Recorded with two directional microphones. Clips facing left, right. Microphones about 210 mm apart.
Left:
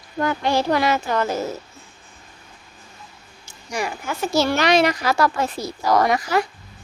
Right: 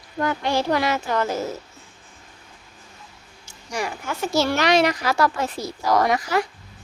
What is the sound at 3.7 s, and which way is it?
A woman's voice, 10° left (ahead or behind).